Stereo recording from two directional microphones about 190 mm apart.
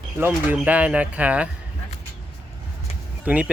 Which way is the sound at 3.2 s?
5° right (ahead or behind).